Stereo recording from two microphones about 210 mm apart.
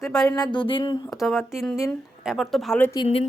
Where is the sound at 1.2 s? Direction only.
Centre (ahead or behind).